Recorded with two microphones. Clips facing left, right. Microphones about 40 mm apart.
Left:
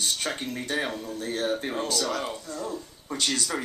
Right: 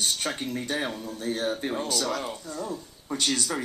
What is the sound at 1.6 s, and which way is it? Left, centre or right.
Speech, centre.